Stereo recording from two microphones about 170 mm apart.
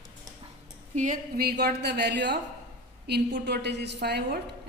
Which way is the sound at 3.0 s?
75° right (ahead or behind).